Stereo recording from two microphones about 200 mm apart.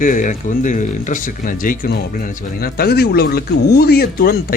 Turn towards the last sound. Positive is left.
turn(degrees=50)  # may be behind; listen again after turning